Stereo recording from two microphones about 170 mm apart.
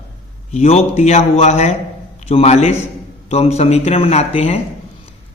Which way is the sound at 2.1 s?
35° left (ahead or behind).